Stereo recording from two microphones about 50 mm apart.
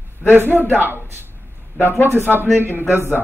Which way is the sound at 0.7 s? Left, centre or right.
Right.